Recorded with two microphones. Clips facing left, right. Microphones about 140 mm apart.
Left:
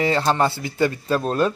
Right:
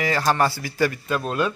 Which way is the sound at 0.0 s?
25° left (ahead or behind).